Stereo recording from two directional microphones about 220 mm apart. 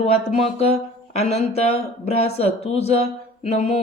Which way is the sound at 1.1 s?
30° left (ahead or behind).